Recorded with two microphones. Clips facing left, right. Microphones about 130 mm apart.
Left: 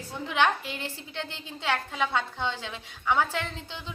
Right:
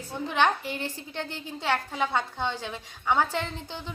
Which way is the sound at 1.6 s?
15° right (ahead or behind).